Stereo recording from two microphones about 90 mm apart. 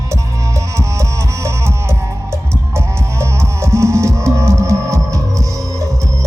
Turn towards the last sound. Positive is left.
turn(degrees=-35)  # may be behind; listen again after turning